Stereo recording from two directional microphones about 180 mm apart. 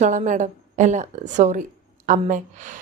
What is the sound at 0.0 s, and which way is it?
A woman's voice, 45° right (ahead or behind).